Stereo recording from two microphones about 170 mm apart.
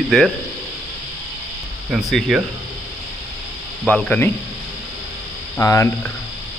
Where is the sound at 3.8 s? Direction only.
5° left (ahead or behind).